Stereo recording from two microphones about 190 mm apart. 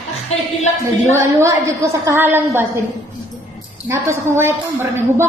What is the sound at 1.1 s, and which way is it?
A woman's voice, 15° right (ahead or behind).